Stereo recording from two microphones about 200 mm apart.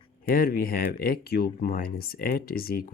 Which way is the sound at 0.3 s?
50° left (ahead or behind).